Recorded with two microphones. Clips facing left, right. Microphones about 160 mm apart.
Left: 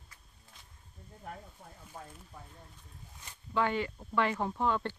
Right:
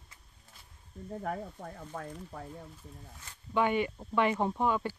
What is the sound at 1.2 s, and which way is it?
Speech, 70° right (ahead or behind).